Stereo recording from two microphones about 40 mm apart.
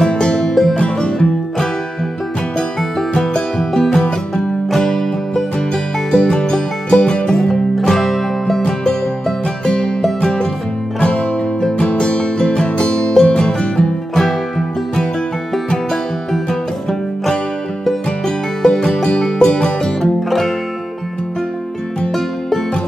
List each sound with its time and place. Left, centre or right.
0.0 s music: left
3.2 s music: centre
7.3 s music: centre
10.2 s music: left
18.7 s music: centre
20.0 s music: centre